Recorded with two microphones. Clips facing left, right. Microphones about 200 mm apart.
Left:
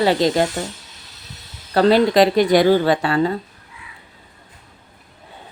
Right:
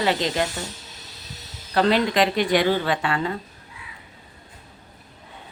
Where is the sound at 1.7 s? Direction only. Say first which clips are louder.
Left 6 dB; 40° left (ahead or behind).